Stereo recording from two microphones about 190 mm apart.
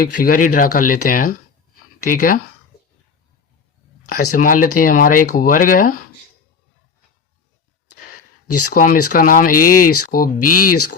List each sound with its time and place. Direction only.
0.0 s speech: 45° left (ahead or behind)
4.1 s speech: 50° left (ahead or behind)
8.7 s speech: 50° left (ahead or behind)